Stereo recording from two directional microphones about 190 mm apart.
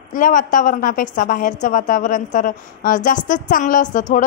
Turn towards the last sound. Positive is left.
turn(degrees=40)  # may be behind; listen again after turning